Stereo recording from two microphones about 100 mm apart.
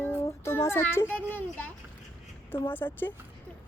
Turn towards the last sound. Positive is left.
turn(degrees=20)  # may be behind; listen again after turning